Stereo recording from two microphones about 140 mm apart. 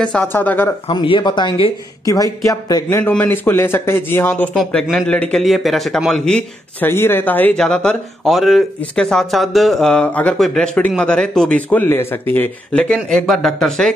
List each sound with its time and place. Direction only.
0.0 s speech: 10° left (ahead or behind)
0.8 s a man's voice: 40° left (ahead or behind); by 4.5 s 15° left (ahead or behind)
4.6 s speech: centre (ahead or behind)
6.9 s speech: 15° left (ahead or behind)